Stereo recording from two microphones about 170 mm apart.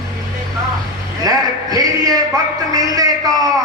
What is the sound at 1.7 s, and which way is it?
Music, 20° right (ahead or behind).